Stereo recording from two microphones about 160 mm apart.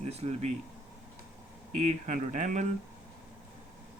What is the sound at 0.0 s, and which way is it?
Speech, 40° right (ahead or behind).